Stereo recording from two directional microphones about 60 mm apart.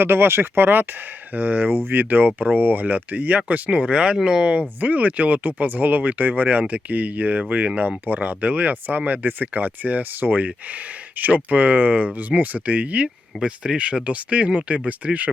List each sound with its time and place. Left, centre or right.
0.0 s speech: right; by 4.6 s centre
4.8 s speech: right